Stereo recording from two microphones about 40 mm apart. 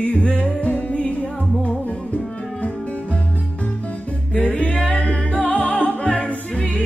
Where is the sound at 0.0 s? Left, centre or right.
Left.